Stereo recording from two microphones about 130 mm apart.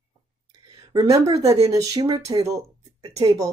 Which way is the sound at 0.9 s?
25° right (ahead or behind).